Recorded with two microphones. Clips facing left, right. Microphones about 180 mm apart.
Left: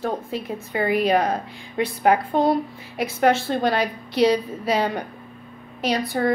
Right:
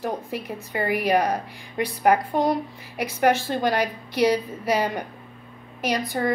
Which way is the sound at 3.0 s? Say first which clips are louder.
Left 2 dB; 15° right (ahead or behind).